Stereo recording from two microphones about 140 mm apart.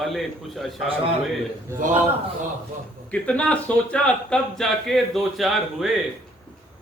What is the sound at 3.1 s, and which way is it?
A man's voice, 10° left (ahead or behind).